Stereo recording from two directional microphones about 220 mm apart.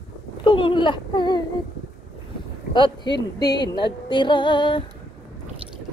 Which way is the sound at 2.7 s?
20° left (ahead or behind).